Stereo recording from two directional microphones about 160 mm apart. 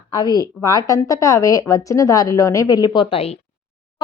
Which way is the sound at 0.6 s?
20° left (ahead or behind).